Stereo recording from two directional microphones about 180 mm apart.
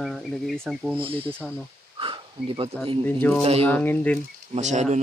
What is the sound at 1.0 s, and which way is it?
Speech, 30° right (ahead or behind).